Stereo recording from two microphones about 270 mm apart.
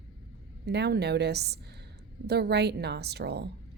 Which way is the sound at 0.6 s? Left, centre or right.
Right.